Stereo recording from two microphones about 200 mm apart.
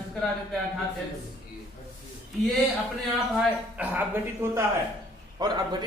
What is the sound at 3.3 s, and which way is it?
Speech, 5° right (ahead or behind).